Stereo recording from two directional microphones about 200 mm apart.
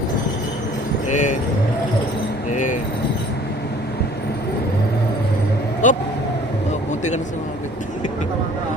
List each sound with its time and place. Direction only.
1.1 s speech: 40° left (ahead or behind)
5.8 s speech: 40° left (ahead or behind)